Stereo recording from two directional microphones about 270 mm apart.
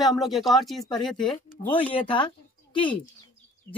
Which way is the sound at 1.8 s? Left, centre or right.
Centre.